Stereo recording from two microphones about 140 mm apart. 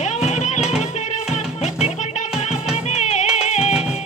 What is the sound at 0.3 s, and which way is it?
Music, 55° left (ahead or behind).